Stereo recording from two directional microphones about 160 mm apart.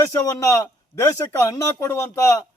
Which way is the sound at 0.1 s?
20° left (ahead or behind).